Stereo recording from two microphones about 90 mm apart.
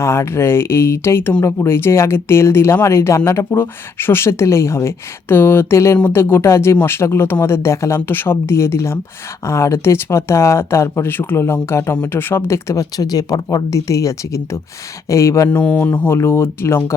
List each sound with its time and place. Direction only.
0.0 s speech: 30° left (ahead or behind)
15.5 s speech: 20° left (ahead or behind)